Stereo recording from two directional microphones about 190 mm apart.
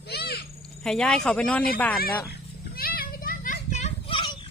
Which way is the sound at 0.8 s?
5° left (ahead or behind).